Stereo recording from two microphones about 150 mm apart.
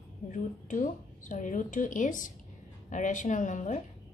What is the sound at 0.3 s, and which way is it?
A woman's voice, 60° left (ahead or behind).